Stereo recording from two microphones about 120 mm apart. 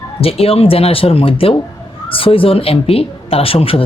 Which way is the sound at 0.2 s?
55° left (ahead or behind).